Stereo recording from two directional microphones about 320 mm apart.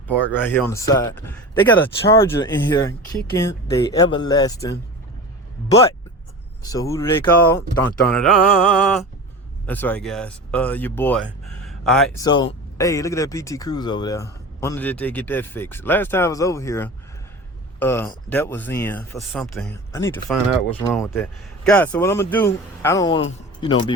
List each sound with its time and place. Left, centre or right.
0.4 s speech: centre
6.6 s speech: centre
12.2 s speech: centre